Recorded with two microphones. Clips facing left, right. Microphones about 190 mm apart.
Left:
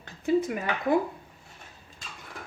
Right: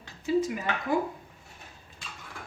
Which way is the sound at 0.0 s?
55° left (ahead or behind).